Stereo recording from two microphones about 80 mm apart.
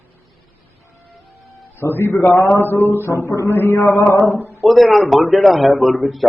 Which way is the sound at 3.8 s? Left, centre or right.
Centre.